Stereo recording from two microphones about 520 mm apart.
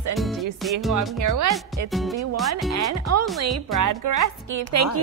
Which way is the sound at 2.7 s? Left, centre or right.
Right.